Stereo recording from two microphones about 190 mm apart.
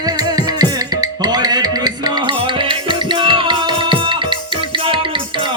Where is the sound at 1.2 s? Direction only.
20° right (ahead or behind).